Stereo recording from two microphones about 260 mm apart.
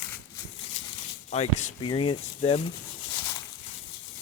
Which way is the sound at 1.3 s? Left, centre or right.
Left.